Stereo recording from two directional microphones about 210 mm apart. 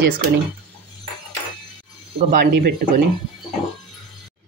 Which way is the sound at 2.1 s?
30° right (ahead or behind).